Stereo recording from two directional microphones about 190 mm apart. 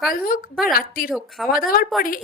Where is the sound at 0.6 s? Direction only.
50° left (ahead or behind).